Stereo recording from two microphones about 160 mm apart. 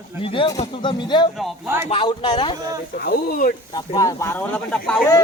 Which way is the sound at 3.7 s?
25° left (ahead or behind).